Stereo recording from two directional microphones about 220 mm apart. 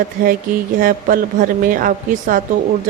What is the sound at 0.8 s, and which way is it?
Speech, 40° right (ahead or behind).